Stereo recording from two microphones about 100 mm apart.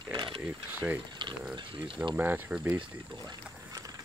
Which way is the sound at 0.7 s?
15° right (ahead or behind).